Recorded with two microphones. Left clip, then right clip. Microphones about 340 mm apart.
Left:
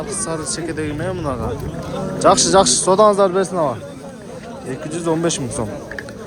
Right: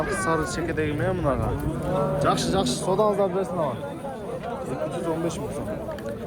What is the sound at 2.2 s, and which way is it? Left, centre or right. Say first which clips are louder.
A man's voice: left 17 dB; centre.